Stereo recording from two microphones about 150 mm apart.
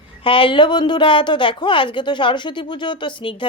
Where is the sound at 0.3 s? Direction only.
35° left (ahead or behind).